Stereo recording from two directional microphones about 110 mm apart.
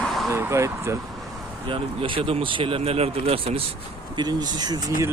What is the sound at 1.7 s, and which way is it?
Speech, 50° right (ahead or behind).